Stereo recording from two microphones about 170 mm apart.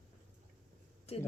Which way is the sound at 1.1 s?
35° left (ahead or behind).